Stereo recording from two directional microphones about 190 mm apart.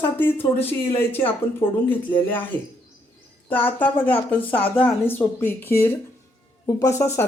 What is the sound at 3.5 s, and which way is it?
Speech, 10° left (ahead or behind).